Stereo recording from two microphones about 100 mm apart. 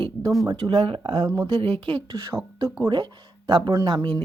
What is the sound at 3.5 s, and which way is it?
Speech, 55° right (ahead or behind).